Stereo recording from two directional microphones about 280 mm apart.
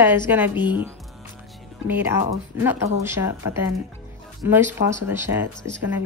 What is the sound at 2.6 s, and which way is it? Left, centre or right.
A woman's voice, centre.